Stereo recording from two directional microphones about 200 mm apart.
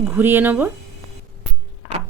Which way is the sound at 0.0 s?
10° right (ahead or behind).